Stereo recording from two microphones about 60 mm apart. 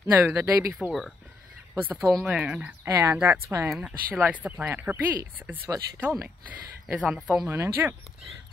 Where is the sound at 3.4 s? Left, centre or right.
Right.